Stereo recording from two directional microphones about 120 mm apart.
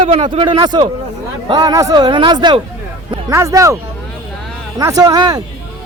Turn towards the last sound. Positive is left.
turn(degrees=-35)  # may be behind; listen again after turning